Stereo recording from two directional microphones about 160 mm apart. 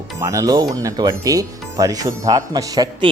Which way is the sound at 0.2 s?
20° right (ahead or behind).